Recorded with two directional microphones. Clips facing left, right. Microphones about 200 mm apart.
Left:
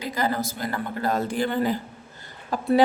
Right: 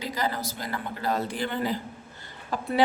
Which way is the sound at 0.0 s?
50° left (ahead or behind).